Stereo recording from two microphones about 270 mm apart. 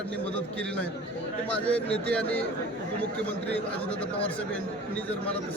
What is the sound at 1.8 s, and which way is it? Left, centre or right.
Speech, right.